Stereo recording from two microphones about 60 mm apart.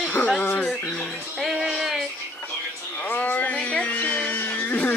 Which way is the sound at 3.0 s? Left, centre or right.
Left.